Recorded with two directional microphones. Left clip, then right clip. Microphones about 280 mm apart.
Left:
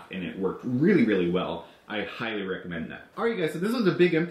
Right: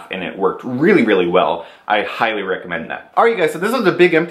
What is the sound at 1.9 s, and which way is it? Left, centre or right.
Speech, centre.